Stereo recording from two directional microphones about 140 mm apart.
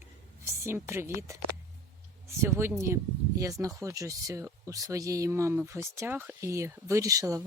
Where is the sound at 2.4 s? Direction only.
15° right (ahead or behind).